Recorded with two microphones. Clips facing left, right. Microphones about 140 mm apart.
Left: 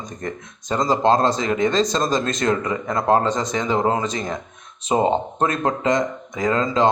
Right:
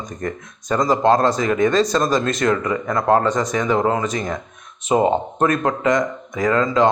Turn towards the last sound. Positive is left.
turn(degrees=25)  # may be behind; listen again after turning